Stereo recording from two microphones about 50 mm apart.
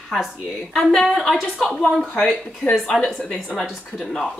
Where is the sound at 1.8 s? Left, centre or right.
Centre.